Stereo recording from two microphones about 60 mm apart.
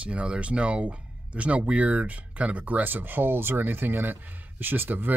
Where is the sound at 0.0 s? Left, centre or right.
Right.